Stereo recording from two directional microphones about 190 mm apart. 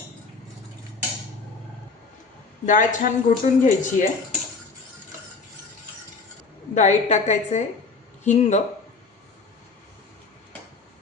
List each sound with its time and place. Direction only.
2.6 s speech: 45° left (ahead or behind)
6.7 s a woman's voice: 40° left (ahead or behind)